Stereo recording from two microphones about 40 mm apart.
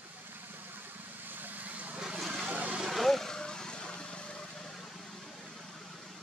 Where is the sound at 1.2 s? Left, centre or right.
Right.